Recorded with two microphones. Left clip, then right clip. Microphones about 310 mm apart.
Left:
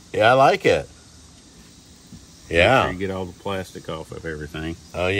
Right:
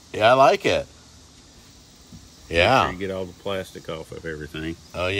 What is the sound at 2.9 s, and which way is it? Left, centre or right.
Speech, centre.